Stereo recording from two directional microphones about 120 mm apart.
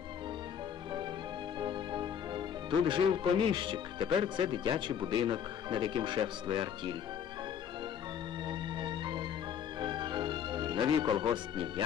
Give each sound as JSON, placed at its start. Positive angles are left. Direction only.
{"t": 1.6, "sound": "music", "side_deg": -40}
{"t": 2.9, "sound": "speech", "side_deg": -40}
{"t": 8.5, "sound": "music", "side_deg": -40}